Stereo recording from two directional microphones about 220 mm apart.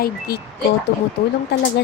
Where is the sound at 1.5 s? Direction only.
50° left (ahead or behind).